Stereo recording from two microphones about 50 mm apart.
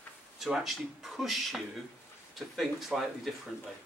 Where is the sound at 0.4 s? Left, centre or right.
Centre.